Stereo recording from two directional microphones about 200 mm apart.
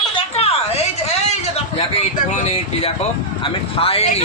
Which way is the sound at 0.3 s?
30° left (ahead or behind).